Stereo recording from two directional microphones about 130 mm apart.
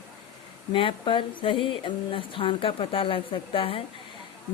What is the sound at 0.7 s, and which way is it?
Speech, 40° left (ahead or behind).